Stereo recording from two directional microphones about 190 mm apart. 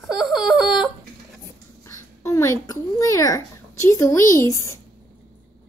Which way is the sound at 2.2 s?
15° left (ahead or behind).